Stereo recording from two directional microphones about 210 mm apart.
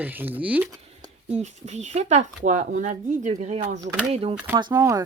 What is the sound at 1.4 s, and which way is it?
Speech, 35° right (ahead or behind).